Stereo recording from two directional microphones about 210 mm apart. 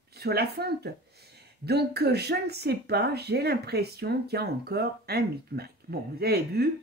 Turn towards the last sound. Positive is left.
turn(degrees=-50)  # may be behind; listen again after turning